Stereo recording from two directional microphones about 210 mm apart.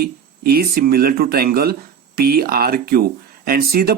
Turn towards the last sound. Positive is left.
turn(degrees=-45)  # may be behind; listen again after turning